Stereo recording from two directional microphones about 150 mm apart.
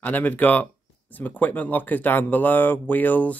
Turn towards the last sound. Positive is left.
turn(degrees=10)  # may be behind; listen again after turning